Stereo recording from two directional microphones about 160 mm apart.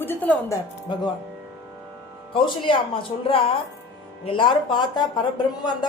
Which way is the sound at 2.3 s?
35° left (ahead or behind).